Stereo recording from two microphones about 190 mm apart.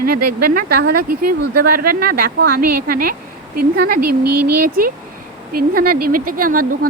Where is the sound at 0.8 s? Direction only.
55° right (ahead or behind).